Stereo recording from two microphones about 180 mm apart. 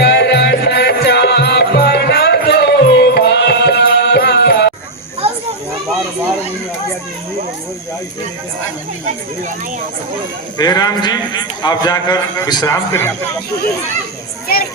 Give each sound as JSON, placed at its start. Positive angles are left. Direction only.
{"t": 0.0, "sound": "music", "side_deg": 65}
{"t": 10.6, "sound": "a man's voice", "side_deg": 20}